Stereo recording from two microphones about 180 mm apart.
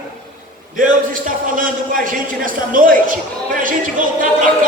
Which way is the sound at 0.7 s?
50° right (ahead or behind).